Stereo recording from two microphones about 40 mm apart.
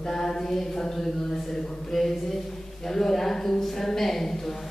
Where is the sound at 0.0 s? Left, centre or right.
Centre.